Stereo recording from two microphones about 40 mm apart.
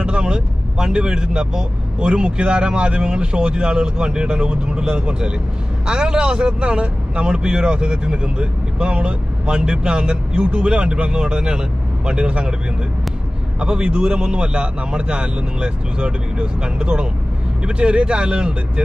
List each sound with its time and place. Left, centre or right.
0.0 s a man's voice: right
13.6 s a man's voice: right